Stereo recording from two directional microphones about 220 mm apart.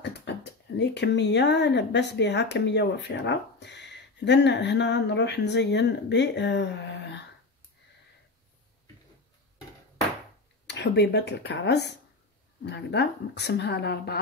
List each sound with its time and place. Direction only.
0.0 s speech: 50° left (ahead or behind)
10.7 s a woman's voice: 50° left (ahead or behind)